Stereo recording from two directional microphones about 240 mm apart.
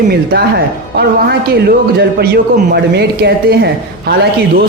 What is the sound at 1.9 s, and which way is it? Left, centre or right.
Speech, right.